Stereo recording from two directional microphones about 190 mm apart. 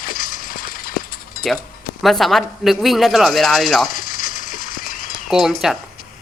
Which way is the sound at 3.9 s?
45° left (ahead or behind).